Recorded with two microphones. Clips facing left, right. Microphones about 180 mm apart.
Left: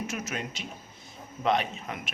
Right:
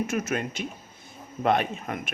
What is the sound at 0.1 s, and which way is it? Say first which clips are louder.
Speech: right 7 dB; 55° right (ahead or behind).